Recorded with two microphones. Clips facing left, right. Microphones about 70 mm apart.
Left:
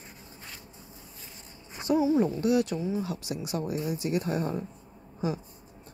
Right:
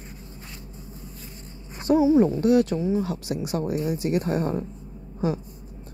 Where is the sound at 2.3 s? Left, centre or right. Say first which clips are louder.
Right 6 dB; right.